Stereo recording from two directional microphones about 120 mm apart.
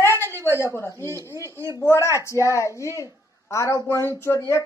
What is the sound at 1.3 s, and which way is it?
Speech, 25° right (ahead or behind).